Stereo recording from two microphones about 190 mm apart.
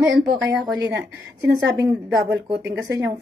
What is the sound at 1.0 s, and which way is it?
A woman's voice, 20° right (ahead or behind).